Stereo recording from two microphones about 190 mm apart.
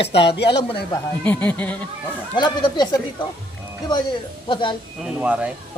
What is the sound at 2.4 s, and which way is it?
Speech, 20° left (ahead or behind).